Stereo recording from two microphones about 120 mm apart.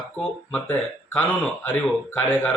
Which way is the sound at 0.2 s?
10° left (ahead or behind).